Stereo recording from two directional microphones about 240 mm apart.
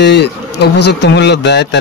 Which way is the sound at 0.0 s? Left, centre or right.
Left.